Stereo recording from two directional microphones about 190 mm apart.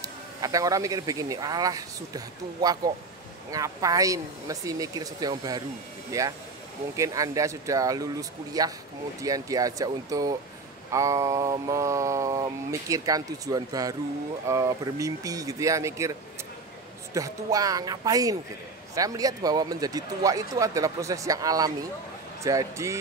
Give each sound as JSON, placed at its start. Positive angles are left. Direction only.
{"t": 0.0, "sound": "speech", "side_deg": -20}
{"t": 3.5, "sound": "mantra", "side_deg": -20}
{"t": 9.2, "sound": "speech", "side_deg": -20}
{"t": 10.9, "sound": "mantra", "side_deg": -15}
{"t": 17.1, "sound": "speech", "side_deg": -20}
{"t": 22.4, "sound": "mantra", "side_deg": -15}